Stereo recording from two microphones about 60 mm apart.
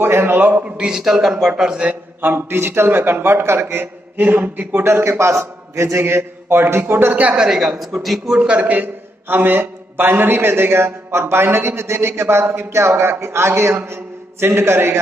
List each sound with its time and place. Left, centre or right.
0.0 s a man's voice: right
0.7 s a man's voice: centre
1.9 s a man's voice: right
5.2 s a man's voice: right
7.3 s a man's voice: centre
8.4 s a man's voice: right